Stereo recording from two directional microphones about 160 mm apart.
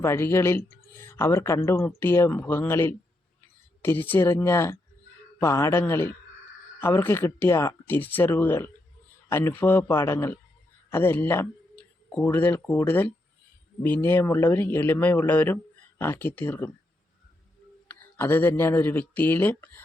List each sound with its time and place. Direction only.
0.0 s speech: 15° left (ahead or behind)
18.2 s speech: 15° left (ahead or behind)